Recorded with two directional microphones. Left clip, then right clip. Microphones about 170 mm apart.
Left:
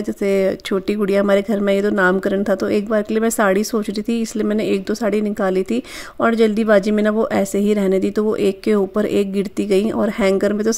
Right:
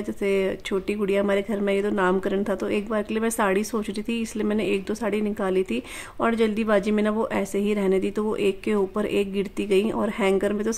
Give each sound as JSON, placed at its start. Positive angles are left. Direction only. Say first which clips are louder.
{"t": 0.2, "sound": "speech", "louder": "left 6 dB", "side_deg": 25}